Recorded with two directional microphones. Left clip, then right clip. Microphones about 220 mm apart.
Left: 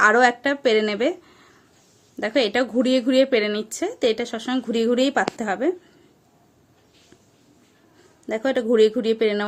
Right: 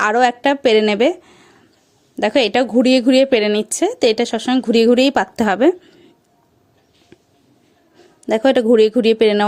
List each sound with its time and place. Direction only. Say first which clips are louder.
0.0 s speech: right 2 dB; 35° right (ahead or behind)
8.3 s speech: right 8 dB; 35° right (ahead or behind)